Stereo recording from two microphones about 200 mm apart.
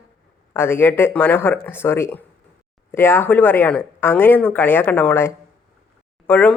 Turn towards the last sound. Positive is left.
turn(degrees=5)  # may be behind; listen again after turning